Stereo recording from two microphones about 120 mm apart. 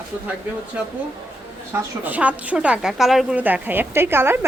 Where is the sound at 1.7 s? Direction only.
15° right (ahead or behind).